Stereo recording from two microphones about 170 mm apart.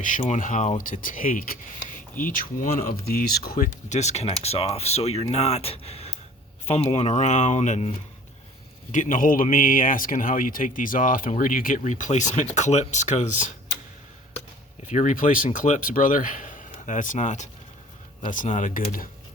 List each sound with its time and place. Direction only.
0.0 s speech: 45° left (ahead or behind)
14.8 s speech: 45° left (ahead or behind)